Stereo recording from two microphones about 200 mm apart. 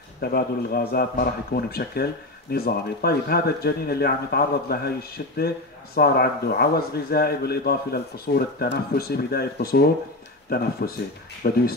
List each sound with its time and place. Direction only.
0.2 s a man's voice: 50° left (ahead or behind)